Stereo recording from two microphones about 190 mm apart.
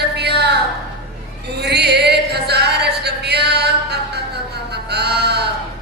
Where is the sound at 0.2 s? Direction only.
60° right (ahead or behind).